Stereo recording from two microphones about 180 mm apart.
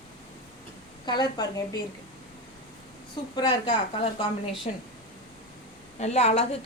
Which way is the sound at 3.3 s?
25° left (ahead or behind).